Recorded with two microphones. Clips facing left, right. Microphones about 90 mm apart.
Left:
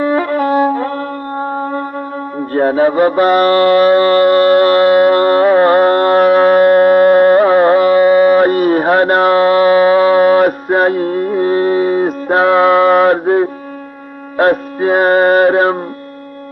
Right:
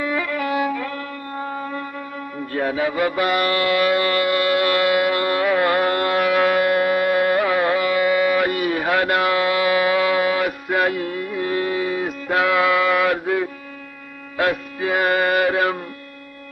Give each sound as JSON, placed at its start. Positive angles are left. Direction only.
{"t": 0.0, "sound": "violin", "side_deg": 45}
{"t": 2.5, "sound": "mantra", "side_deg": 40}
{"t": 14.3, "sound": "music", "side_deg": 40}